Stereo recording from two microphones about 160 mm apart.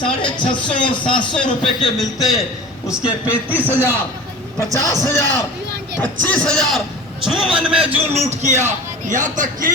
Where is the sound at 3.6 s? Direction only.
10° right (ahead or behind).